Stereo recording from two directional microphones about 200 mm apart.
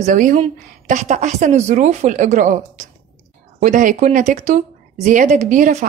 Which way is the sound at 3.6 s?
40° right (ahead or behind).